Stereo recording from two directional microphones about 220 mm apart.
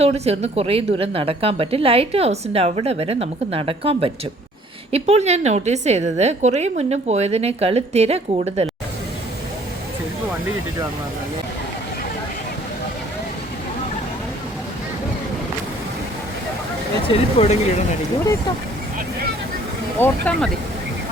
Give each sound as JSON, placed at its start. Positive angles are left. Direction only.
{"t": 0.0, "sound": "a woman's voice", "side_deg": -30}
{"t": 17.1, "sound": "speech", "side_deg": 30}
{"t": 20.0, "sound": "speech", "side_deg": 5}